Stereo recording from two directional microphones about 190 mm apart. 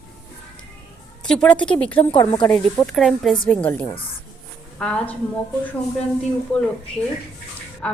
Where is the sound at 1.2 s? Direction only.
5° left (ahead or behind).